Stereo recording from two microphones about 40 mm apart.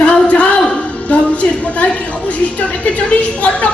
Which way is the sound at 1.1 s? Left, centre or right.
Left.